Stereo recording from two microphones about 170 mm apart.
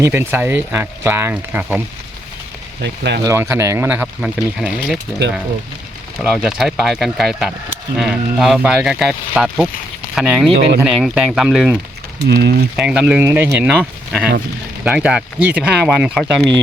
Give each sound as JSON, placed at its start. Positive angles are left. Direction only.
{"t": 0.0, "sound": "speech", "side_deg": -15}
{"t": 2.8, "sound": "speech", "side_deg": -90}
{"t": 3.2, "sound": "speech", "side_deg": -15}
{"t": 6.1, "sound": "speech", "side_deg": 0}
{"t": 12.3, "sound": "speech", "side_deg": -70}
{"t": 12.7, "sound": "speech", "side_deg": -5}